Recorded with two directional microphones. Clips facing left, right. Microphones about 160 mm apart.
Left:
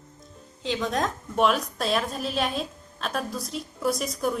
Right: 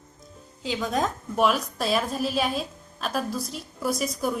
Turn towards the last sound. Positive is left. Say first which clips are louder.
# even
turn(degrees=-5)  # may be behind; listen again after turning